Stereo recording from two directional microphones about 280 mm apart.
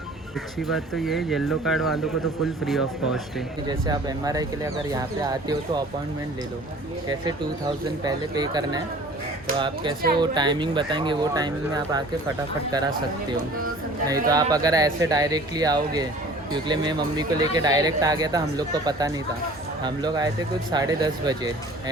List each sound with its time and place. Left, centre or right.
0.7 s speech: centre
3.7 s speech: centre
8.0 s speech: centre
14.1 s speech: centre